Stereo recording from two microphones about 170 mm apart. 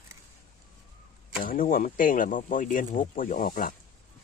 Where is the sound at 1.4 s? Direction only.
55° left (ahead or behind).